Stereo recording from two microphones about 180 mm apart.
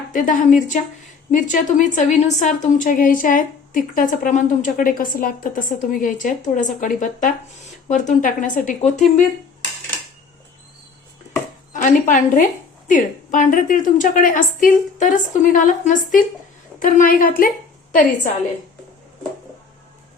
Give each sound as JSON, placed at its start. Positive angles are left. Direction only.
{"t": 0.1, "sound": "a woman's voice", "side_deg": 45}
{"t": 11.7, "sound": "a woman's voice", "side_deg": 45}